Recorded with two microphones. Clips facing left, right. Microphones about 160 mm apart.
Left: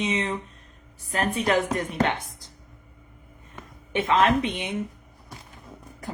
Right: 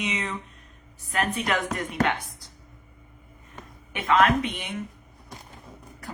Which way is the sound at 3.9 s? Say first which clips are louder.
Left 1 dB; 25° left (ahead or behind).